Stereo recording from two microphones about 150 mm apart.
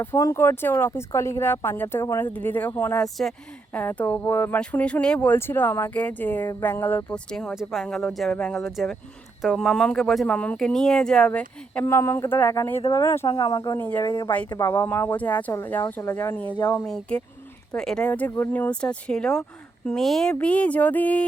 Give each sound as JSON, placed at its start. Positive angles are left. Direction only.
{"t": 0.0, "sound": "speech", "side_deg": 20}
{"t": 3.0, "sound": "a woman's voice", "side_deg": 0}
{"t": 13.7, "sound": "speech", "side_deg": 10}
{"t": 14.0, "sound": "a woman's voice", "side_deg": 30}
{"t": 14.6, "sound": "speech", "side_deg": 15}
{"t": 16.6, "sound": "a woman's voice", "side_deg": 25}
{"t": 16.8, "sound": "speech", "side_deg": 5}